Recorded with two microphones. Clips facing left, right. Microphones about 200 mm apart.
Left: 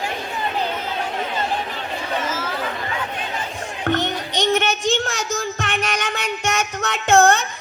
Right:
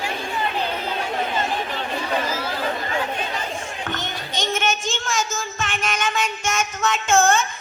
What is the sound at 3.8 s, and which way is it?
A woman's voice, 65° left (ahead or behind).